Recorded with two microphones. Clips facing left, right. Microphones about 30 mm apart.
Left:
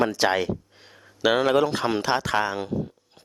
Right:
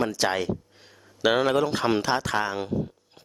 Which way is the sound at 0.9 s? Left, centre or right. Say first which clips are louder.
Left 2 dB; left.